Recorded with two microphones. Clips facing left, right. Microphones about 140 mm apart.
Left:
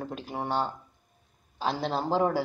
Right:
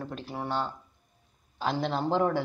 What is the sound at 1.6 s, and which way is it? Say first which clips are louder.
Speech: even; centre (ahead or behind).